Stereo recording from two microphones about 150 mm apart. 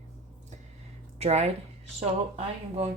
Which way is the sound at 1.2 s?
45° right (ahead or behind).